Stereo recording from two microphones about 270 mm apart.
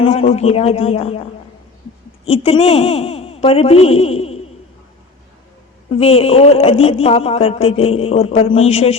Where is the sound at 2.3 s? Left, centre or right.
Left.